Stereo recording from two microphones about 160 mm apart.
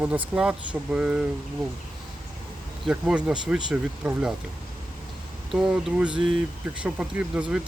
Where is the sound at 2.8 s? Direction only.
5° right (ahead or behind).